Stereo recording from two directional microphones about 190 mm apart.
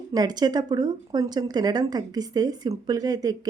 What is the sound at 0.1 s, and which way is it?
Speech, 20° right (ahead or behind).